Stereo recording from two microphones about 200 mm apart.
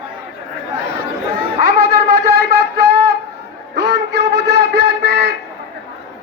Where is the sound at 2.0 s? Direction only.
50° right (ahead or behind).